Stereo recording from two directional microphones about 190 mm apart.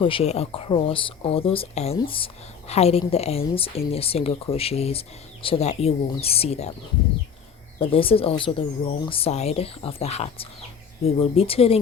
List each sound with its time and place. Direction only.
0.0 s speech: 30° left (ahead or behind)
7.8 s speech: 30° left (ahead or behind)